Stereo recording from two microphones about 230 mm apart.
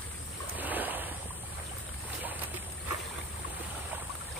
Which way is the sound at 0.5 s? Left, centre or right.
Centre.